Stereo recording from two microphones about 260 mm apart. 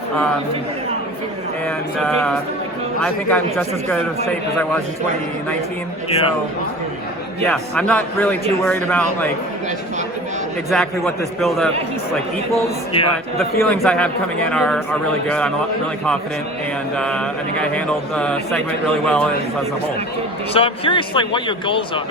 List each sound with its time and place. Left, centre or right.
1.6 s speech: centre
6.1 s a man's voice: left
7.5 s speech: centre
10.7 s speech: centre
12.6 s a man's voice: left
13.6 s speech: centre
17.0 s speech: centre
20.5 s a man's voice: left